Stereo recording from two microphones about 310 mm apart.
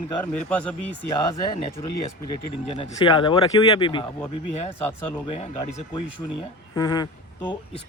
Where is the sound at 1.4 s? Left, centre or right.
Centre.